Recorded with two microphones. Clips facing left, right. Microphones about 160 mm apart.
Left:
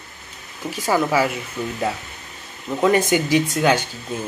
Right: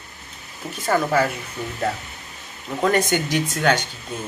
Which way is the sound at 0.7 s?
5° left (ahead or behind).